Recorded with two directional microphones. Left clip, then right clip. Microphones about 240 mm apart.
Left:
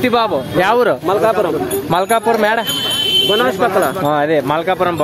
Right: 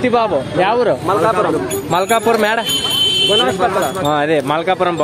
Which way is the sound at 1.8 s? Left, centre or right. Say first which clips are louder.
Even; centre.